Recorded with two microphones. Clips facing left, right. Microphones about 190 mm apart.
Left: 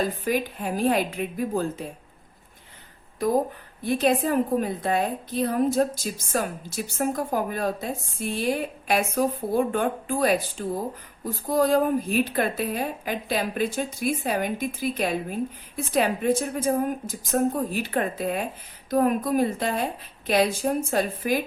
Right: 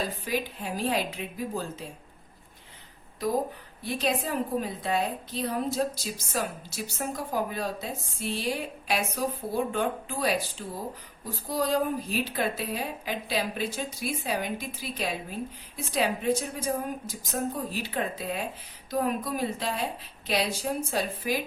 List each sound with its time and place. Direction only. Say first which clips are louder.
0.3 s a woman's voice: left 5 dB; 50° left (ahead or behind)
3.8 s a woman's voice: left 7 dB; 50° left (ahead or behind)